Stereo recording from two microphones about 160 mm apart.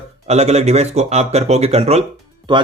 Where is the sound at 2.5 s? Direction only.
30° right (ahead or behind).